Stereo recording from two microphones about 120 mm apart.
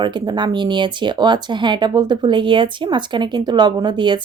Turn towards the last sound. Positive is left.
turn(degrees=-40)  # may be behind; listen again after turning